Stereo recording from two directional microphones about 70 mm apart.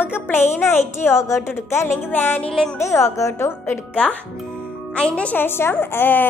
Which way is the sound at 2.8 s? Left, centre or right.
Left.